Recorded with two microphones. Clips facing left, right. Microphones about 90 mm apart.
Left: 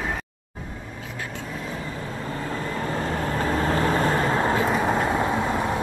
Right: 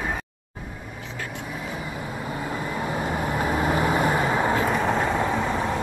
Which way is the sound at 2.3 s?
10° right (ahead or behind).